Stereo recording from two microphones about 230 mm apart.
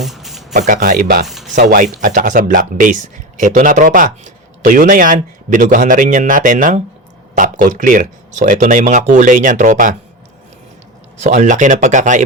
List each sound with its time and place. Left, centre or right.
0.0 s a sound: centre
0.5 s speech: right
1.3 s speech: centre
1.5 s speech: right
11.2 s speech: right